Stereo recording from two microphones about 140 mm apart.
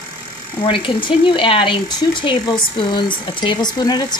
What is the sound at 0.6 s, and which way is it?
Speech, 40° left (ahead or behind).